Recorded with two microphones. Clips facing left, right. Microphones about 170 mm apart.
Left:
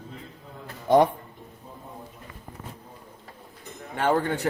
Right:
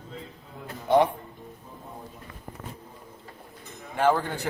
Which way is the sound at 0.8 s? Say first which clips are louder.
Left 2 dB; 40° left (ahead or behind).